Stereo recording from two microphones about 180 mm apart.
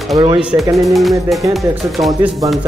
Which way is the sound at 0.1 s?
20° right (ahead or behind).